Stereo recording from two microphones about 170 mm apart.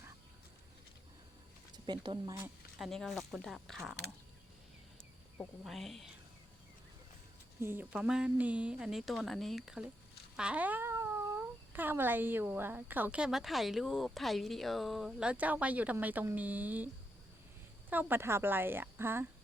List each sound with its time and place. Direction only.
1.7 s speech: 25° right (ahead or behind)
2.3 s speech: 10° right (ahead or behind)
2.8 s a woman's voice: centre (ahead or behind)
5.6 s a woman's voice: centre (ahead or behind)
7.6 s a woman's voice: 10° right (ahead or behind)